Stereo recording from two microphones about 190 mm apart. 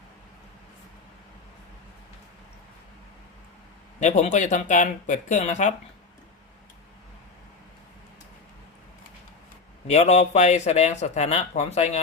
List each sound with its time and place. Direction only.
4.0 s a man's voice: 40° left (ahead or behind)
9.8 s a man's voice: 35° left (ahead or behind)